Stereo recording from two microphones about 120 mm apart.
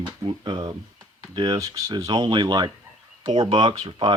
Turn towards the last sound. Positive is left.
turn(degrees=-45)  # may be behind; listen again after turning